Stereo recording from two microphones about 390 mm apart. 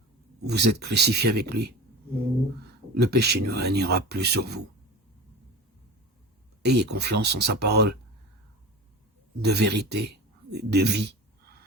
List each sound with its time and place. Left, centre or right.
0.4 s speech: right
3.0 s speech: right
6.7 s speech: right
9.4 s speech: right